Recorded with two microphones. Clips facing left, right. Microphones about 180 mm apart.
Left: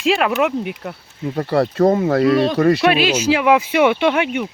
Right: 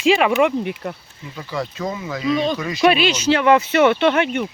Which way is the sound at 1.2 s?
65° left (ahead or behind).